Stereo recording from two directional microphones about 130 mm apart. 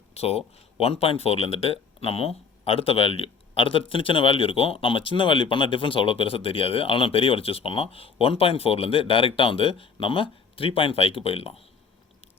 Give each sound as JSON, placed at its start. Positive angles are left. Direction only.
{"t": 0.1, "sound": "speech", "side_deg": 50}